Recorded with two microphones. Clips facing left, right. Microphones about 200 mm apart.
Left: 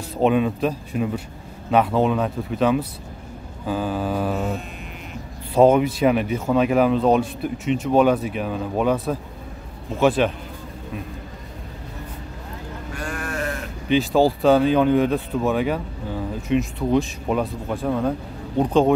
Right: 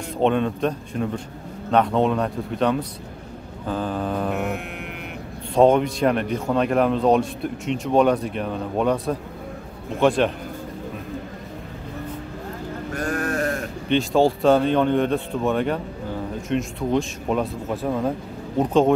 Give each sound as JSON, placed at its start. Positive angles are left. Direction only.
{"t": 0.2, "sound": "speech", "side_deg": 5}
{"t": 5.5, "sound": "speech", "side_deg": 5}
{"t": 12.9, "sound": "sheep", "side_deg": -45}
{"t": 13.8, "sound": "speech", "side_deg": 0}